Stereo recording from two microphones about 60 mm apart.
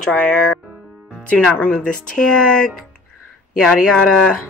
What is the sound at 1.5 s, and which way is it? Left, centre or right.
Speech, left.